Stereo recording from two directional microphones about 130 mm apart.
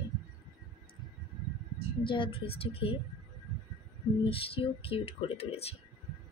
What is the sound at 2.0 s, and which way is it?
Speech, 40° left (ahead or behind).